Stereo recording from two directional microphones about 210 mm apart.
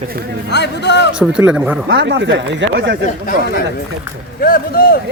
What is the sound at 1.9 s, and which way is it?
Speech, 55° right (ahead or behind).